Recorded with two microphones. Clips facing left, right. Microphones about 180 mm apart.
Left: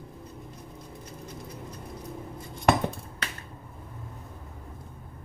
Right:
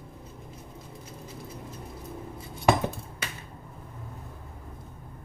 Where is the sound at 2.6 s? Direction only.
5° right (ahead or behind).